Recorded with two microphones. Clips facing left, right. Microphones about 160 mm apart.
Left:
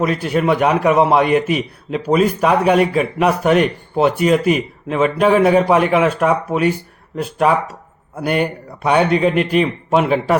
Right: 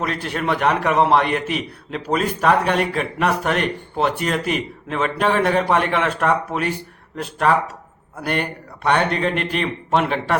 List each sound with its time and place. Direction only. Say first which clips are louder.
0.0 s a man's voice: left 7 dB; 5° left (ahead or behind)